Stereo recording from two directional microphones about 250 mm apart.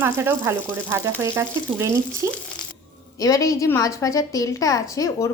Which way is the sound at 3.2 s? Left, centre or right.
Centre.